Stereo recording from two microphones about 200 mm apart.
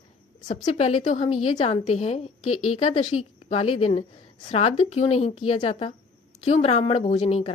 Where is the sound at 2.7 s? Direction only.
30° left (ahead or behind).